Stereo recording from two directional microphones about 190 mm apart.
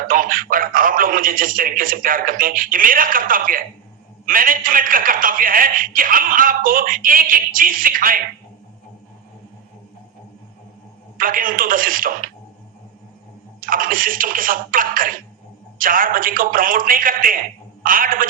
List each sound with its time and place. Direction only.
0.1 s a man's voice: 45° right (ahead or behind)
11.2 s a man's voice: 45° right (ahead or behind)
13.6 s a man's voice: 45° right (ahead or behind)